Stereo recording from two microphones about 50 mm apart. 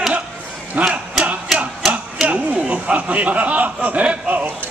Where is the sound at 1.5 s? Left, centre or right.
Centre.